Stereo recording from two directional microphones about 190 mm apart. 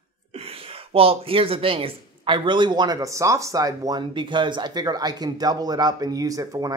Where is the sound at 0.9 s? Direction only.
30° right (ahead or behind).